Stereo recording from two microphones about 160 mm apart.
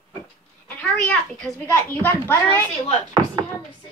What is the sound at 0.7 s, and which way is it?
A child's voice, 10° left (ahead or behind).